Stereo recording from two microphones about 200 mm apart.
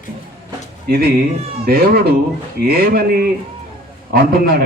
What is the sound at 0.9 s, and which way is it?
Speech, 50° right (ahead or behind).